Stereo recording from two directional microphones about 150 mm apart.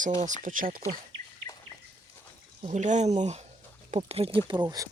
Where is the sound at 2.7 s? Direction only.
55° right (ahead or behind).